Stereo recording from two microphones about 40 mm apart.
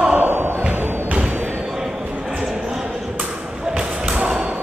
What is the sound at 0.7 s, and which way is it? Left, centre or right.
Thump, right.